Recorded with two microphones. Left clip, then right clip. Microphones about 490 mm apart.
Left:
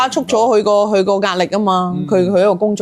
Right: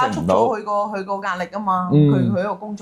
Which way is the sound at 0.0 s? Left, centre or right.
Left.